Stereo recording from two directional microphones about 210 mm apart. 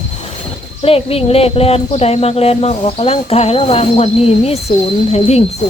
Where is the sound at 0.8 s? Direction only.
30° left (ahead or behind).